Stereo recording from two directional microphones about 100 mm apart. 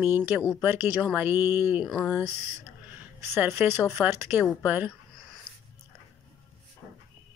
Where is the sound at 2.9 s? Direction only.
20° right (ahead or behind).